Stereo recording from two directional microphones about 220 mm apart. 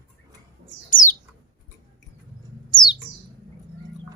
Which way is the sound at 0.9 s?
35° left (ahead or behind).